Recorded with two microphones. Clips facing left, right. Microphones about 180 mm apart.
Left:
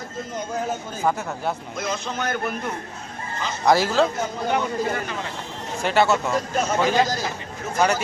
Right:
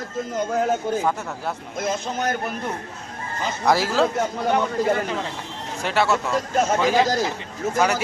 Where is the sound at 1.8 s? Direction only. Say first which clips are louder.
Right 5 dB; 45° right (ahead or behind).